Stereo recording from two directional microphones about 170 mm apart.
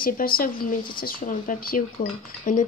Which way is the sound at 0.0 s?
60° left (ahead or behind).